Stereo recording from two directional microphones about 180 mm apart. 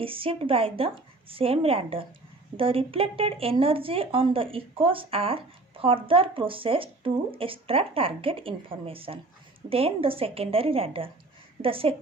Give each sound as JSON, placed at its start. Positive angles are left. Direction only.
{"t": 0.0, "sound": "speech", "side_deg": -30}